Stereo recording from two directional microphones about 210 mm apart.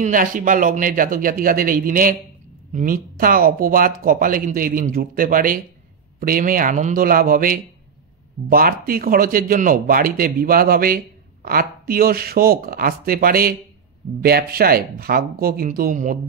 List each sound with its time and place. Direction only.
0.0 s speech: 40° right (ahead or behind)